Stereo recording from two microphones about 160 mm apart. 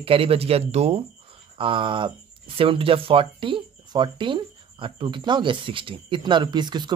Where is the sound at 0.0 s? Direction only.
35° right (ahead or behind).